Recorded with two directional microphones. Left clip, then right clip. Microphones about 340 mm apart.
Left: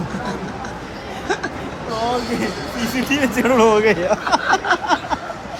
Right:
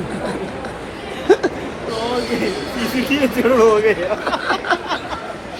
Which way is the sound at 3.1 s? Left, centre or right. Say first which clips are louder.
Right 1 dB; centre.